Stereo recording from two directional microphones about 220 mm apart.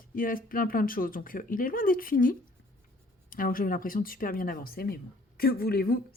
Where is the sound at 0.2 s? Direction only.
40° left (ahead or behind).